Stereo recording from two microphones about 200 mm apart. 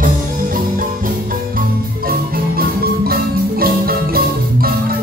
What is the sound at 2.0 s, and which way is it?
Music, 50° right (ahead or behind).